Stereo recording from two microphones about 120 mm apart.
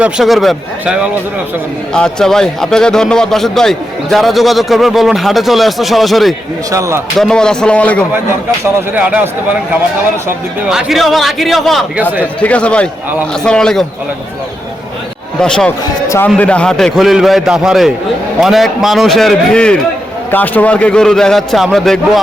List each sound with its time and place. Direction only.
0.0 s a man's voice: centre (ahead or behind)
6.7 s speech: 25° right (ahead or behind)
7.2 s speech: 5° left (ahead or behind)
9.0 s a man's voice: 10° right (ahead or behind)
10.7 s a man's voice: 5° right (ahead or behind)
12.2 s a man's voice: 10° left (ahead or behind)
15.4 s speech: 5° left (ahead or behind)
16.0 s a man's voice: 20° left (ahead or behind)
16.4 s a man's voice: 10° left (ahead or behind)